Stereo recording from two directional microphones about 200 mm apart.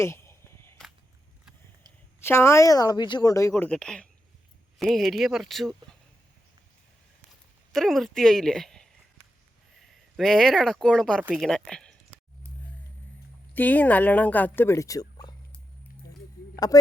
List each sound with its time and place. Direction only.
0.0 s a sound: 15° left (ahead or behind)
2.2 s speech: 10° left (ahead or behind)
7.7 s speech: centre (ahead or behind)
13.5 s speech: 10° left (ahead or behind)